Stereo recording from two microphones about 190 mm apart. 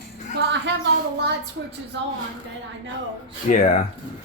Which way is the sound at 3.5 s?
40° left (ahead or behind).